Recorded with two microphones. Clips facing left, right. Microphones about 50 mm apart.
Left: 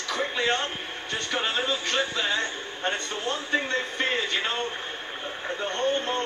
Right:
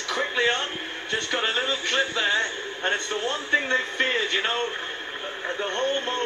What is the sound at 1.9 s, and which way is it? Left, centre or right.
A man's voice, right.